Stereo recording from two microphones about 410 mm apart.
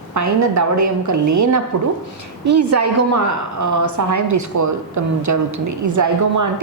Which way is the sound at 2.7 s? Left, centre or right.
Right.